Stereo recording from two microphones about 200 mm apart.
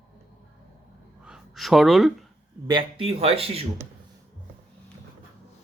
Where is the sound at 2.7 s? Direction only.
25° right (ahead or behind).